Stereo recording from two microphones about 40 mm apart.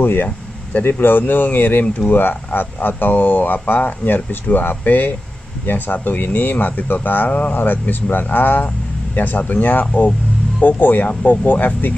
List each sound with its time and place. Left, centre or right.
0.0 s speech: left